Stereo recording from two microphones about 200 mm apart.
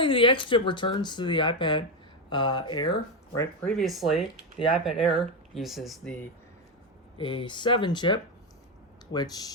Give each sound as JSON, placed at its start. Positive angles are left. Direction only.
{"t": 0.0, "sound": "speech", "side_deg": 25}
{"t": 3.3, "sound": "speech", "side_deg": 5}
{"t": 7.2, "sound": "speech", "side_deg": 25}